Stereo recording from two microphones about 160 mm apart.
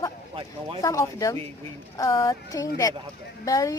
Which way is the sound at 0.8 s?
20° left (ahead or behind).